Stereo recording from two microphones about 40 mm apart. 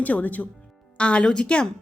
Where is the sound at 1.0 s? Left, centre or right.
Left.